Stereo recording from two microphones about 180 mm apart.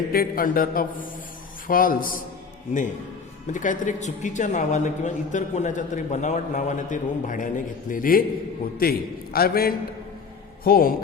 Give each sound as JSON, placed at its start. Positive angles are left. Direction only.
{"t": 0.1, "sound": "a man's voice", "side_deg": 55}
{"t": 3.5, "sound": "a man's voice", "side_deg": 45}